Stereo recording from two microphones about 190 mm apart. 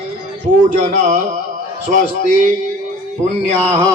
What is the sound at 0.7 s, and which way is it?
Speech, 40° right (ahead or behind).